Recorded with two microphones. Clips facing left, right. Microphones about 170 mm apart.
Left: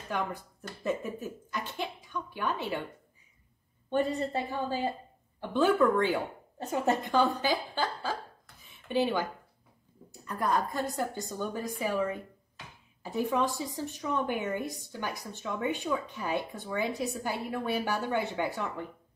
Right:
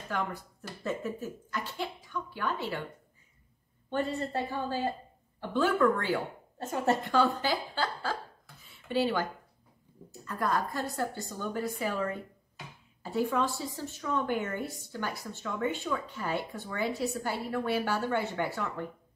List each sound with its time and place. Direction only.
0.1 s a woman's voice: 15° left (ahead or behind)
3.9 s a woman's voice: 15° left (ahead or behind)
8.6 s a sound: 20° left (ahead or behind)
10.2 s a woman's voice: 15° left (ahead or behind)